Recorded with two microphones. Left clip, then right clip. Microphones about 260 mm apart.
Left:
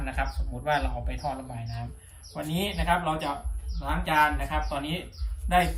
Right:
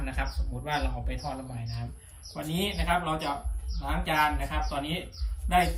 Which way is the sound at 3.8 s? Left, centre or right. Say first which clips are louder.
Left 3 dB; centre.